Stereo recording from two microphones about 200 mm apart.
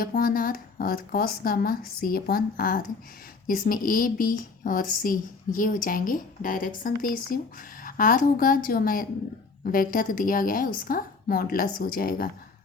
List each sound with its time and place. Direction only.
0.0 s speech: 45° left (ahead or behind)